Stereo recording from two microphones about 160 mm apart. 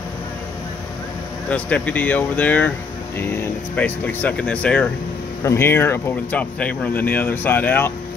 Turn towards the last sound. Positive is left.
turn(degrees=10)  # may be behind; listen again after turning